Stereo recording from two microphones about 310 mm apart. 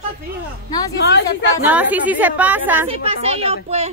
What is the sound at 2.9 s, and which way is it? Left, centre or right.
Speech, centre.